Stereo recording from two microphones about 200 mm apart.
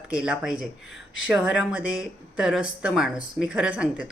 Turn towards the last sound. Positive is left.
turn(degrees=-5)  # may be behind; listen again after turning